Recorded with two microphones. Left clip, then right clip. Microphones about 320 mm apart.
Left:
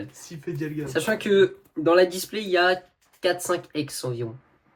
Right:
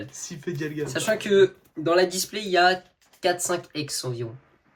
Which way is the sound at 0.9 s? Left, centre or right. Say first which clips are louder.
Even; centre.